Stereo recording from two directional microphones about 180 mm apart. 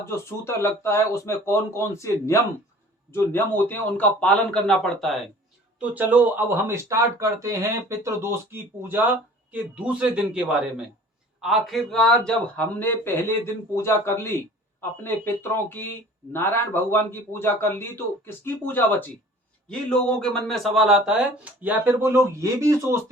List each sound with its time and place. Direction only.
0.0 s speech: 15° left (ahead or behind); by 23.0 s 15° right (ahead or behind)